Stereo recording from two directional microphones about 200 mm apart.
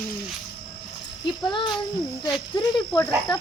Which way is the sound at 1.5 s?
25° left (ahead or behind).